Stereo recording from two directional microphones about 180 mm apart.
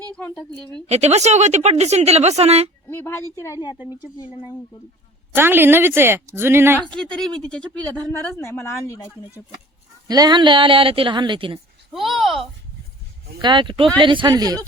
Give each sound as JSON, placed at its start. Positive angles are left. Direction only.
{"t": 0.2, "sound": "a woman's voice", "side_deg": 10}
{"t": 0.9, "sound": "a woman's voice", "side_deg": -35}
{"t": 2.8, "sound": "speech", "side_deg": 10}
{"t": 5.3, "sound": "speech", "side_deg": -10}
{"t": 6.8, "sound": "speech", "side_deg": 5}
{"t": 10.1, "sound": "a woman's voice", "side_deg": -20}
{"t": 11.9, "sound": "speech", "side_deg": 0}
{"t": 13.4, "sound": "a woman's voice", "side_deg": -25}